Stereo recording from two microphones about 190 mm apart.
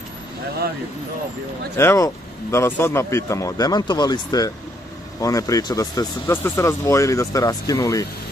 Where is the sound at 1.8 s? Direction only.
15° left (ahead or behind).